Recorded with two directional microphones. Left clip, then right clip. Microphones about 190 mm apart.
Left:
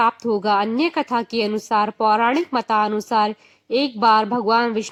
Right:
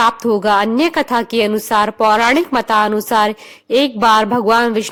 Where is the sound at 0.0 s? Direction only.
30° right (ahead or behind).